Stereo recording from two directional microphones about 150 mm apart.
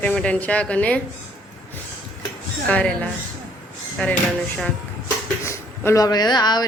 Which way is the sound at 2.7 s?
10° left (ahead or behind).